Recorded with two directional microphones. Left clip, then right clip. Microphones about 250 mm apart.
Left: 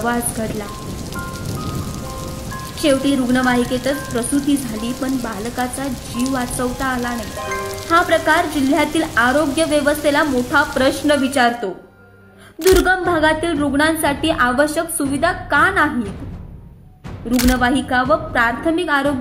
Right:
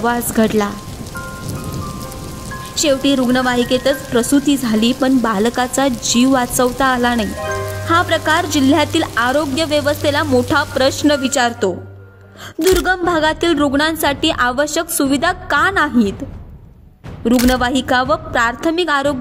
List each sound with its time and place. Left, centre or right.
0.0 s a woman's voice: right
2.8 s a woman's voice: right
12.5 s speech: centre
12.8 s a woman's voice: right
17.3 s a woman's voice: centre
17.6 s a woman's voice: right